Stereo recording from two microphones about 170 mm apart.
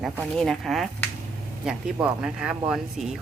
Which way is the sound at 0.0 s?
Centre (ahead or behind).